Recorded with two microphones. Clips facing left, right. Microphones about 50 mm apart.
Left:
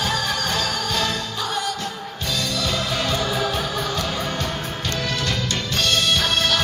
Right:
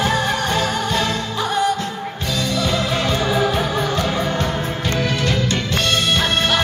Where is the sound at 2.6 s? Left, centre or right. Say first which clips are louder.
Right 5 dB; right.